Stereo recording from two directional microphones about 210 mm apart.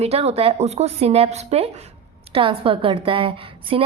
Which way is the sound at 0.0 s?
30° right (ahead or behind).